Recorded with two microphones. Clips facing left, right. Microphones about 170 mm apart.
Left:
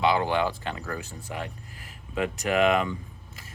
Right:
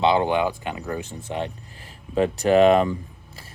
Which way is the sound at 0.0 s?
25° right (ahead or behind).